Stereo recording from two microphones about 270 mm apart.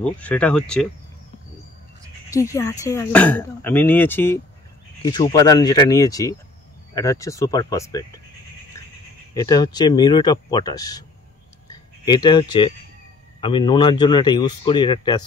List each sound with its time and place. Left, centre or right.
0.0 s speech: centre
2.2 s speech: centre
9.3 s speech: centre